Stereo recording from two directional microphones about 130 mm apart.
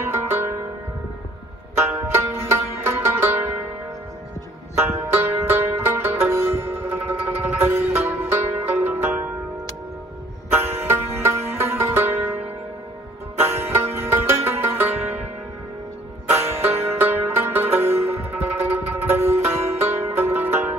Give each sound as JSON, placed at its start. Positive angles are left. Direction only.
{"t": 0.1, "sound": "music", "side_deg": -20}
{"t": 2.0, "sound": "music", "side_deg": -15}
{"t": 5.1, "sound": "music", "side_deg": -15}
{"t": 10.5, "sound": "music", "side_deg": -15}
{"t": 13.4, "sound": "music", "side_deg": -15}
{"t": 16.3, "sound": "music", "side_deg": -55}
{"t": 17.0, "sound": "music", "side_deg": -15}